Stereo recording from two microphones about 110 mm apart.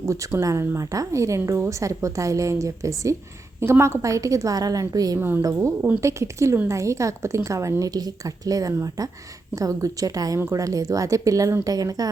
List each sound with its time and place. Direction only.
0.0 s a woman's voice: 25° right (ahead or behind)